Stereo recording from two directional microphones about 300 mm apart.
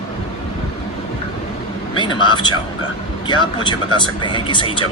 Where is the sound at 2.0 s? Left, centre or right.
Centre.